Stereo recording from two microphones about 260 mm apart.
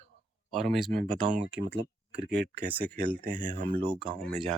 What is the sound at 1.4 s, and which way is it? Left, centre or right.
Speech, right.